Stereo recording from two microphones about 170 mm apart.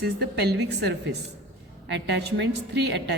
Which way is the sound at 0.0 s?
75° right (ahead or behind).